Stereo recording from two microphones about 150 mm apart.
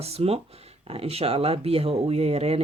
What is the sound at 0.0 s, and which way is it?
Speech, 40° right (ahead or behind).